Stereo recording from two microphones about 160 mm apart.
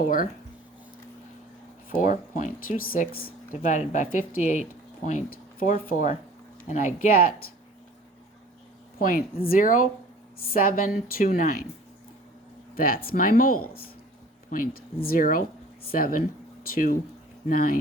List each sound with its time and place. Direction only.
0.0 s speech: 60° left (ahead or behind)
1.9 s speech: 55° left (ahead or behind)
3.6 s speech: 50° left (ahead or behind)
9.0 s a woman's voice: 60° left (ahead or behind)
12.7 s speech: 65° left (ahead or behind)